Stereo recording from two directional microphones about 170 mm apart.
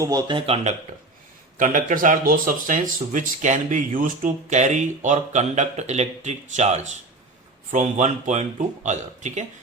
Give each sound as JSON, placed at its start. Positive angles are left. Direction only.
{"t": 0.0, "sound": "speech", "side_deg": -20}
{"t": 1.5, "sound": "speech", "side_deg": -50}